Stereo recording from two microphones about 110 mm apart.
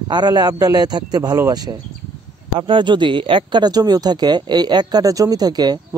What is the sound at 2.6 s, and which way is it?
Speech, 50° right (ahead or behind).